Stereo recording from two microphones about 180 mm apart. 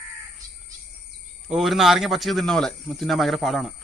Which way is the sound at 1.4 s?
Centre (ahead or behind).